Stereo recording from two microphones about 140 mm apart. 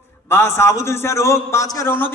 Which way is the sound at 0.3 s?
15° left (ahead or behind).